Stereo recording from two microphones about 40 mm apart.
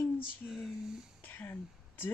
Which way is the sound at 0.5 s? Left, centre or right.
Centre.